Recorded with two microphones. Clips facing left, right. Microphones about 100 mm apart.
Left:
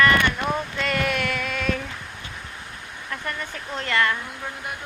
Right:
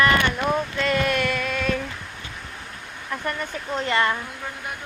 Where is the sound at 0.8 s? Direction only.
5° left (ahead or behind).